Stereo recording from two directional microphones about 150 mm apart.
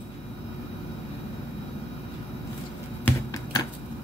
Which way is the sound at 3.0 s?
20° left (ahead or behind).